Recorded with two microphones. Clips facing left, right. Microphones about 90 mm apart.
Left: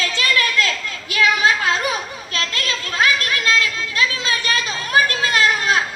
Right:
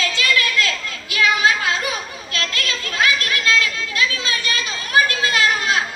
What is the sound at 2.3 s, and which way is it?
Children playing, 30° left (ahead or behind).